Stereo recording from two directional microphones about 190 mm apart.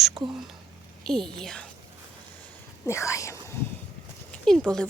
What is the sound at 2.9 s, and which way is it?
Speech, 15° left (ahead or behind).